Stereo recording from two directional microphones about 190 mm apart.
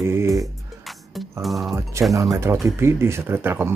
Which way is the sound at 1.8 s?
15° right (ahead or behind).